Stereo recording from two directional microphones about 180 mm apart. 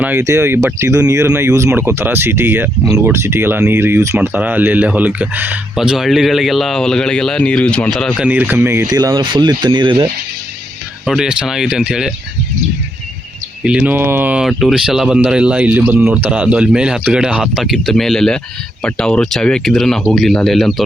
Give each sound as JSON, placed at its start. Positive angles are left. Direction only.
{"t": 0.0, "sound": "speech", "side_deg": -10}
{"t": 8.3, "sound": "speech", "side_deg": -10}
{"t": 11.0, "sound": "speech", "side_deg": -5}
{"t": 13.7, "sound": "speech", "side_deg": -5}